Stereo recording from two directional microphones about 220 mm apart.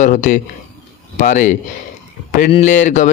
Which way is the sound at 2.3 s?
35° left (ahead or behind).